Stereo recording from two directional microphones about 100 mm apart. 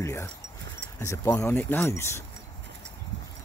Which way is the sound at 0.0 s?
25° left (ahead or behind).